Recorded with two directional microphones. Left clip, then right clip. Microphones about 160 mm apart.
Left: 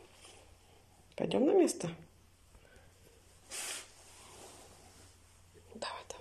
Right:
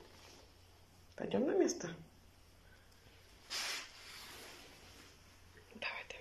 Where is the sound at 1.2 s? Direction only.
25° left (ahead or behind).